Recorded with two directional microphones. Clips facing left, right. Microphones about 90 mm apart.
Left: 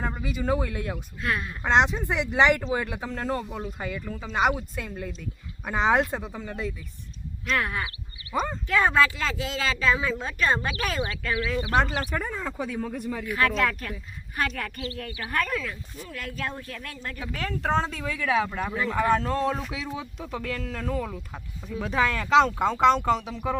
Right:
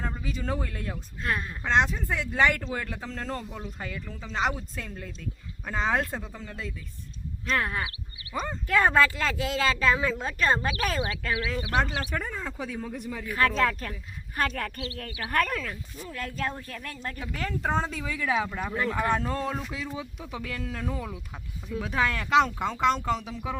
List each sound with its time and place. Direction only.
0.0 s speech: 10° left (ahead or behind)
1.2 s speech: 35° right (ahead or behind)
1.6 s speech: 20° left (ahead or behind)
7.4 s speech: 35° right (ahead or behind)
8.6 s speech: 45° right (ahead or behind)
12.1 s speech: centre (ahead or behind)
13.3 s speech: 35° right (ahead or behind)
16.0 s speech: 35° right (ahead or behind)
17.2 s speech: 5° right (ahead or behind)
21.7 s speech: centre (ahead or behind)